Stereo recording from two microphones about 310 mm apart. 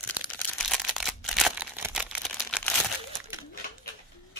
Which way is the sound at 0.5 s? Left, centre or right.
Centre.